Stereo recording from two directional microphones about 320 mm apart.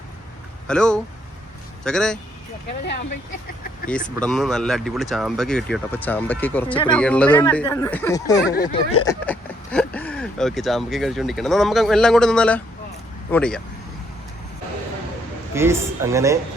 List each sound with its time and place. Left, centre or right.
0.7 s speech: centre
4.2 s speech: centre
9.2 s speech: centre
15.5 s speech: centre